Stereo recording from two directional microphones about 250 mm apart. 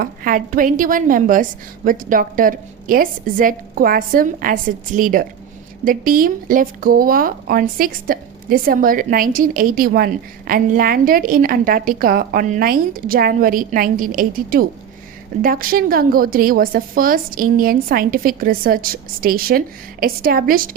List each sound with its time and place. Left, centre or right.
0.0 s speech: right